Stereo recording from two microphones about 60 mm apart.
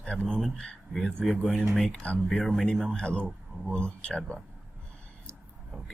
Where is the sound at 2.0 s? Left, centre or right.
Left.